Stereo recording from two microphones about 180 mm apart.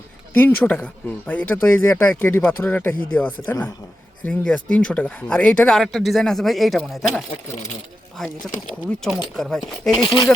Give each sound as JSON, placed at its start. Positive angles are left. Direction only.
{"t": 0.3, "sound": "speech", "side_deg": 10}
{"t": 8.2, "sound": "speech", "side_deg": 0}
{"t": 10.0, "sound": "speech", "side_deg": 25}